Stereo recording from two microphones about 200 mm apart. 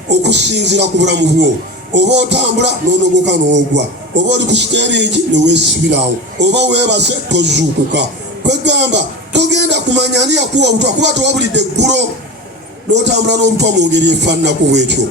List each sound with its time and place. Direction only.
0.1 s a man's voice: 60° right (ahead or behind)